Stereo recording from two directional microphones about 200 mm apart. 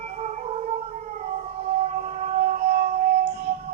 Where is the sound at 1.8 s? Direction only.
35° right (ahead or behind).